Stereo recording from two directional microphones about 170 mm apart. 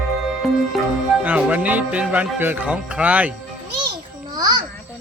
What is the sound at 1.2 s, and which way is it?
Music, 10° right (ahead or behind).